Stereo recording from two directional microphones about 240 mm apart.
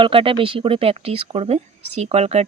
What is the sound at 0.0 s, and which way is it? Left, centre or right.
Speech, right.